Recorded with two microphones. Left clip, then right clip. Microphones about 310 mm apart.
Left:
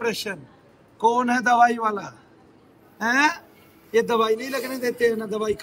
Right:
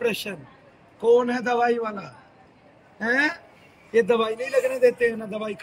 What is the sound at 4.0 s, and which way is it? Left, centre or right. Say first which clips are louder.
A man's voice: even; left.